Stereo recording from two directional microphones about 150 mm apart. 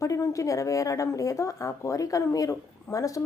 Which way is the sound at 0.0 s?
20° left (ahead or behind).